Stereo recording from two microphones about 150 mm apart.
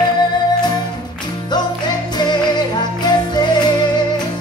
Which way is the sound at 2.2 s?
30° left (ahead or behind).